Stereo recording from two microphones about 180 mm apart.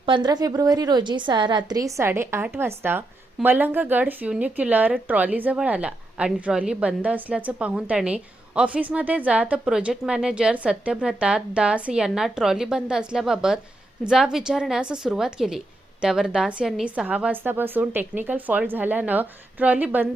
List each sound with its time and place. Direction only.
0.0 s a woman's voice: 25° right (ahead or behind); by 20.1 s 10° right (ahead or behind)